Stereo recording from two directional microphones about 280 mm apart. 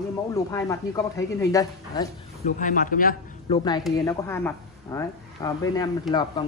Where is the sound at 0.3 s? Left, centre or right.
Centre.